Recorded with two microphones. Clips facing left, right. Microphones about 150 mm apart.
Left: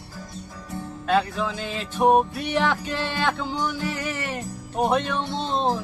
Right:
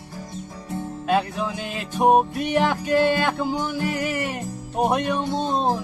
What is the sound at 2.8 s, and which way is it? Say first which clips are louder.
Speech: right 9 dB; 45° right (ahead or behind).